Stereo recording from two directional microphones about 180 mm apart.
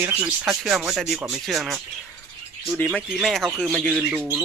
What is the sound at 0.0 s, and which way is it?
Speech, 10° right (ahead or behind).